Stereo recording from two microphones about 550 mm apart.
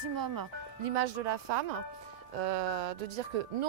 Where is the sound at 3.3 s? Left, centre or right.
Right.